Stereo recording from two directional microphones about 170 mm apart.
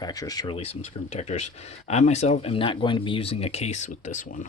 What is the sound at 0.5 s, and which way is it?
Speech, 35° left (ahead or behind).